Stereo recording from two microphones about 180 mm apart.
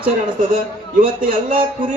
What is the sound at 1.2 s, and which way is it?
Speech, 50° right (ahead or behind).